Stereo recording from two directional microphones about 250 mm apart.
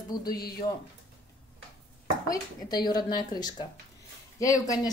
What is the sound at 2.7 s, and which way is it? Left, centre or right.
Speech, centre.